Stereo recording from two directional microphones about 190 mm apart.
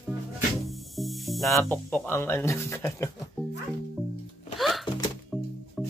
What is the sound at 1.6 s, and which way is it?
Speech, 10° left (ahead or behind).